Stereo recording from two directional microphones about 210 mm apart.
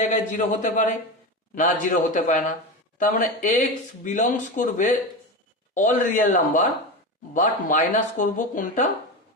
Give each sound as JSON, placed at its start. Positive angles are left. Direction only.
{"t": 0.0, "sound": "speech", "side_deg": 35}